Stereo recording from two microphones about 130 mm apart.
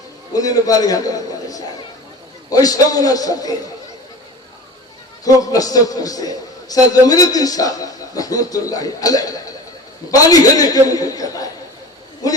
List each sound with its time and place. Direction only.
0.3 s a man's voice: 30° left (ahead or behind)
5.2 s a man's voice: 25° left (ahead or behind)